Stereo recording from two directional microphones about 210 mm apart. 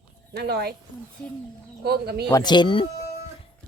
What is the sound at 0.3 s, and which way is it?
Speech, 50° right (ahead or behind).